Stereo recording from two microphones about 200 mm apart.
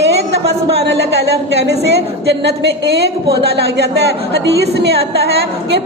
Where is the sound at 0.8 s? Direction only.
55° right (ahead or behind).